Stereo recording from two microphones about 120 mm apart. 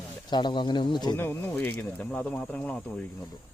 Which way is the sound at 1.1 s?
15° left (ahead or behind).